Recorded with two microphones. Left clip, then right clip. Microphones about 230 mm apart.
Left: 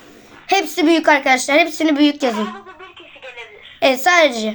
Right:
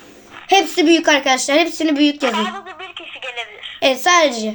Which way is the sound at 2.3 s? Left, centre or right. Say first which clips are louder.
Right 4 dB; right.